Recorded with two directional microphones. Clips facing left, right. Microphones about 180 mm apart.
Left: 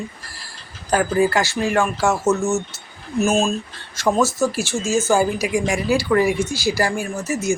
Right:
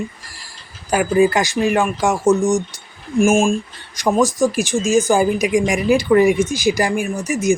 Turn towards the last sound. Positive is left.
turn(degrees=-15)  # may be behind; listen again after turning